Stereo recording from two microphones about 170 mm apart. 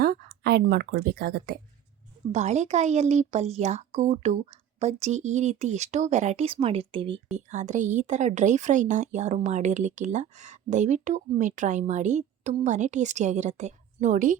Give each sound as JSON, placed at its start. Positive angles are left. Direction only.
{"t": 0.0, "sound": "speech", "side_deg": -65}
{"t": 2.3, "sound": "speech", "side_deg": -40}
{"t": 7.3, "sound": "speech", "side_deg": -45}